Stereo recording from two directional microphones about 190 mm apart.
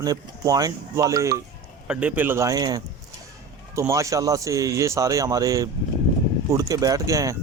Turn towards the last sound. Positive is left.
turn(degrees=-15)  # may be behind; listen again after turning